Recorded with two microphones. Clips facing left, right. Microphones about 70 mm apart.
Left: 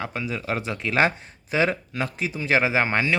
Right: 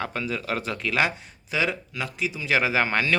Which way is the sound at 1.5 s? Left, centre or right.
Left.